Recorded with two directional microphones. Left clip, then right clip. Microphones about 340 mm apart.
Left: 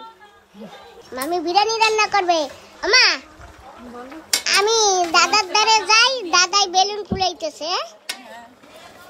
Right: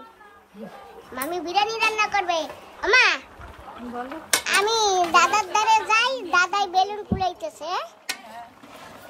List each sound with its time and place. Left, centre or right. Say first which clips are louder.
1.1 s a child's voice: left 6 dB; centre
4.5 s a child's voice: left 5 dB; centre